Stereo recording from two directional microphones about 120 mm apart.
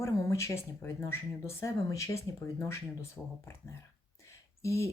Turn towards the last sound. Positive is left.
turn(degrees=25)  # may be behind; listen again after turning